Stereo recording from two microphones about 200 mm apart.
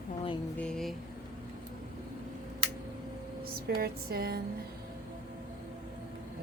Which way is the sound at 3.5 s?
50° right (ahead or behind).